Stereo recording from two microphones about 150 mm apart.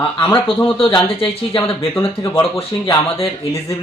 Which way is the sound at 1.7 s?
20° left (ahead or behind).